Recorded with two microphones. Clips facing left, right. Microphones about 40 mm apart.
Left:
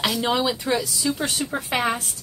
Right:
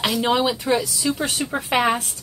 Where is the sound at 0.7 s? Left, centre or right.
Right.